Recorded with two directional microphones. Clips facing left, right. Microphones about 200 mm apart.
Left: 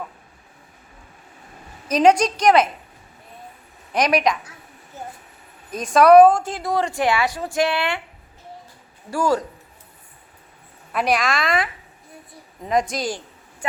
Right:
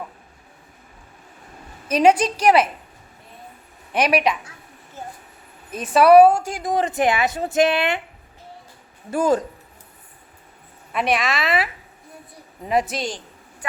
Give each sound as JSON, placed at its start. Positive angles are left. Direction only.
{"t": 1.9, "sound": "a woman's voice", "side_deg": -5}
{"t": 3.9, "sound": "a woman's voice", "side_deg": -5}
{"t": 5.7, "sound": "a woman's voice", "side_deg": -5}
{"t": 9.0, "sound": "a woman's voice", "side_deg": -20}
{"t": 10.9, "sound": "a woman's voice", "side_deg": 0}